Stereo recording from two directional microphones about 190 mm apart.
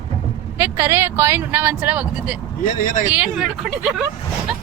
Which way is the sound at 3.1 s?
5° right (ahead or behind).